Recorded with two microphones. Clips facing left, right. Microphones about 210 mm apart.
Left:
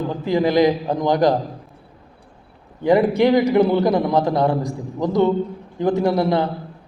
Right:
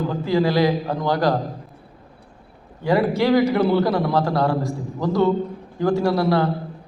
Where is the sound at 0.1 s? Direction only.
20° left (ahead or behind).